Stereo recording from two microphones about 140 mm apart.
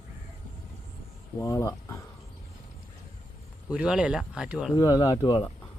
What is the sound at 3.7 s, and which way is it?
Speech, 5° right (ahead or behind).